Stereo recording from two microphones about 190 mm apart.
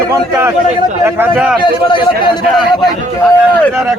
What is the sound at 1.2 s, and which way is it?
Speech, 10° right (ahead or behind).